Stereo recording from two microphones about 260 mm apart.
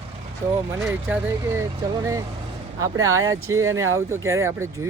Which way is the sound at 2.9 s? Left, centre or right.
Centre.